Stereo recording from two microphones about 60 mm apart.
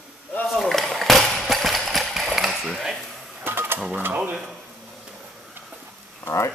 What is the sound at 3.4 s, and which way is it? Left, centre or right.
Sewing machine, right.